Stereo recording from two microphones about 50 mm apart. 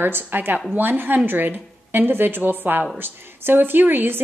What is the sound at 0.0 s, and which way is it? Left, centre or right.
A woman's voice, right.